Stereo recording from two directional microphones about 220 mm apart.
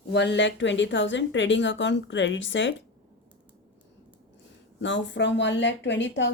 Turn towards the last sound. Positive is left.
turn(degrees=55)  # may be behind; listen again after turning